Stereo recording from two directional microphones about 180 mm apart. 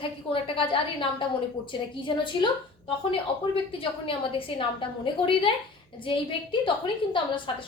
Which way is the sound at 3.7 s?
30° left (ahead or behind).